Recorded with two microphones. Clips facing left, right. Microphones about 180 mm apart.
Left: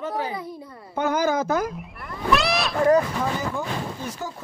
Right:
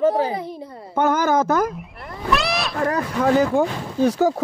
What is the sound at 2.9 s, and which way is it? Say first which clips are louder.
Speech: right 3 dB; 70° right (ahead or behind).